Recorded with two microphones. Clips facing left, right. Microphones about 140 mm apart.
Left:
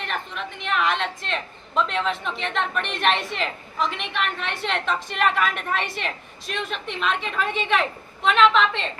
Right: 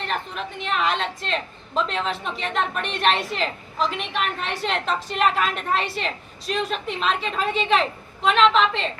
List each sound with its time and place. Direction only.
0.0 s a woman's voice: 35° right (ahead or behind)